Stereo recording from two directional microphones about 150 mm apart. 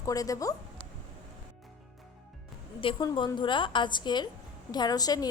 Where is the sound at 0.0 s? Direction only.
25° left (ahead or behind).